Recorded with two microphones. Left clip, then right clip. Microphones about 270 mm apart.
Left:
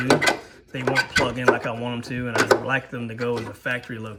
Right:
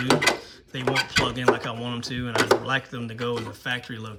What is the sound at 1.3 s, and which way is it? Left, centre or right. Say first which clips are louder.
Speech: left 2 dB; centre.